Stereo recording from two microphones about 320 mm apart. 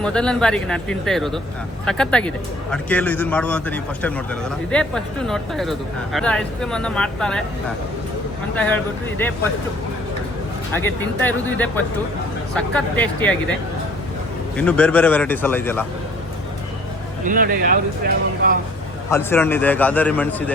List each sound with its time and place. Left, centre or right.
0.0 s speech: centre
9.1 s speech: centre
10.8 s speech: centre
14.5 s speech: centre
17.2 s speech: right
19.1 s speech: centre